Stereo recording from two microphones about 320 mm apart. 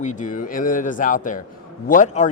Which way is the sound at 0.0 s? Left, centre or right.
Left.